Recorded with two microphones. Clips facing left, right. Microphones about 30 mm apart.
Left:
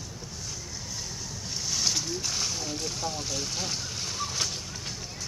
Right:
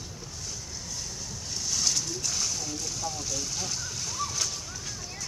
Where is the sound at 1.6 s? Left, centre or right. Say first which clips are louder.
Even; centre.